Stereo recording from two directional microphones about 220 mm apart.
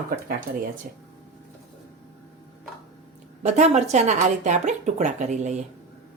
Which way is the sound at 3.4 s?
30° right (ahead or behind).